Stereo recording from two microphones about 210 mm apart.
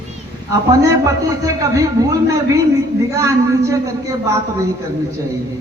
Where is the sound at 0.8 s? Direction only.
15° right (ahead or behind).